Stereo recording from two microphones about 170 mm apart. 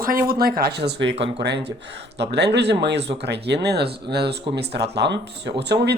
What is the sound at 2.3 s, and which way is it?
Speech, 80° right.